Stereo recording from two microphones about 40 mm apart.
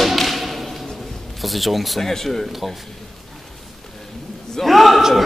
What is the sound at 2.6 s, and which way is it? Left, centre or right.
Whip, centre.